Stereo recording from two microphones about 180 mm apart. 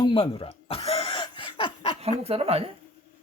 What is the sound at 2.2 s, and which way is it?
Speech, 35° right (ahead or behind).